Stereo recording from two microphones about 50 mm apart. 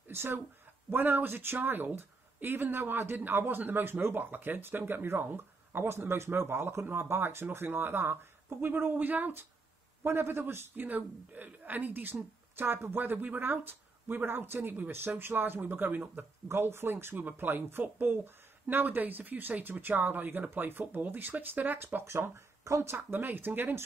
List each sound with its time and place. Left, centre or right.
0.1 s speech: right
6.9 s speech: right
10.0 s speech: right
16.4 s speech: right
22.1 s speech: right
23.1 s speech: right